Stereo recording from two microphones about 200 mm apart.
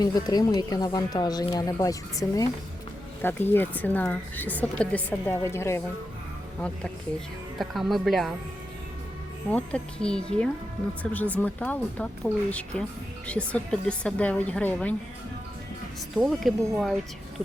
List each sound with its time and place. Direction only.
0.0 s speech: 20° left (ahead or behind)
7.6 s speech: centre (ahead or behind)
9.5 s speech: 5° left (ahead or behind)
16.1 s speech: centre (ahead or behind)